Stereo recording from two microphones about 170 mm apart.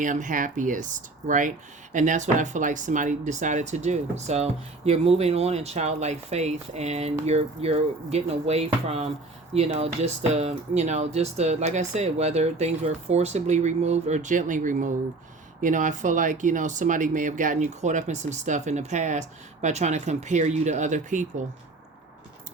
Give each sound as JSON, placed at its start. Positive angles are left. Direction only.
{"t": 0.0, "sound": "speech", "side_deg": -50}